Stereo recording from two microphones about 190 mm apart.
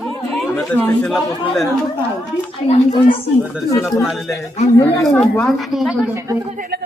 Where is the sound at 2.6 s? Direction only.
30° left (ahead or behind).